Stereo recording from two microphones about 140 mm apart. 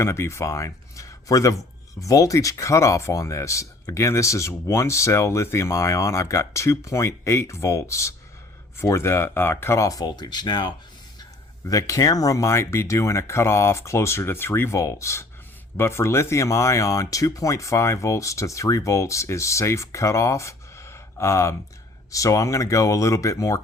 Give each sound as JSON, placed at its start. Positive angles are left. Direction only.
{"t": 0.0, "sound": "speech", "side_deg": 20}
{"t": 11.7, "sound": "speech", "side_deg": 25}